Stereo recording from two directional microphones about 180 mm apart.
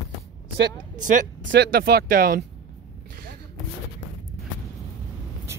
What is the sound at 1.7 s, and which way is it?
Speech, 60° right (ahead or behind).